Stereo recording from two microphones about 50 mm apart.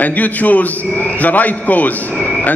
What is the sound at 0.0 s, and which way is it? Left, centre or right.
A man's voice, left.